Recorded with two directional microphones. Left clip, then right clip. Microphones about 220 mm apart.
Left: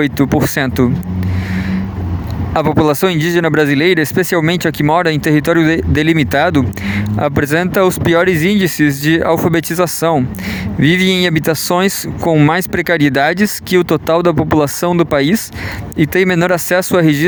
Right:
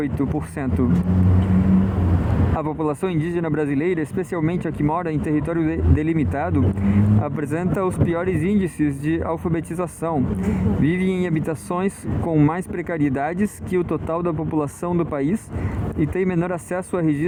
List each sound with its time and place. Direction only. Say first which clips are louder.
0.0 s speech: left 11 dB; 55° left (ahead or behind)
2.6 s speech: left 14 dB; 50° left (ahead or behind)